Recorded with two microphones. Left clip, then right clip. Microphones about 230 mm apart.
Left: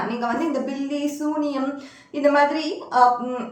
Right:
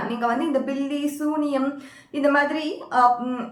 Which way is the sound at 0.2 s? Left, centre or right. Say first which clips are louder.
Right 4 dB; centre.